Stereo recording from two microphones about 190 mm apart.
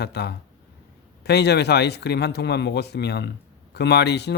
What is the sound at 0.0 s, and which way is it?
A man's voice, 60° left (ahead or behind).